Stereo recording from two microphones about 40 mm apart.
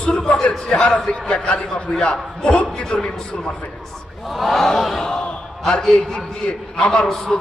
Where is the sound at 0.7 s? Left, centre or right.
Left.